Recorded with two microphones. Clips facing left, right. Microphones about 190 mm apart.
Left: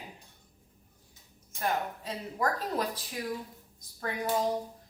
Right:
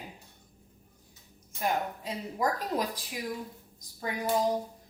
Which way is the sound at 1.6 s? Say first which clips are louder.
Right 1 dB; 15° right (ahead or behind).